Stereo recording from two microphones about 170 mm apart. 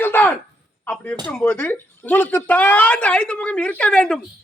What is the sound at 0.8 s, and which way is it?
Speech, 10° left (ahead or behind).